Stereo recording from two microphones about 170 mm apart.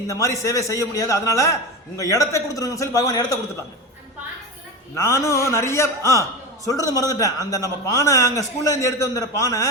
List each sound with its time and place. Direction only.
0.1 s a man's voice: 20° left (ahead or behind)
4.9 s a man's voice: 15° left (ahead or behind)